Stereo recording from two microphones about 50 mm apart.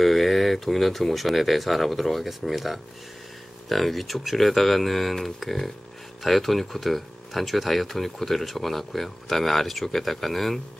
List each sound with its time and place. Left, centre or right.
0.0 s speech: centre